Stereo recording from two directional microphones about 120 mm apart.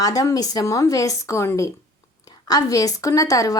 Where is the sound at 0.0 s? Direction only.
30° left (ahead or behind).